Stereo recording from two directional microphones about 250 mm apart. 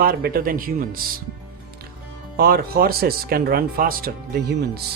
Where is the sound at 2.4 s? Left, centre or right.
Right.